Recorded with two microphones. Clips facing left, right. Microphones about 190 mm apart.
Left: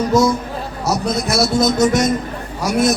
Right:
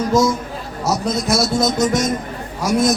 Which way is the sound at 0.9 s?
65° left (ahead or behind).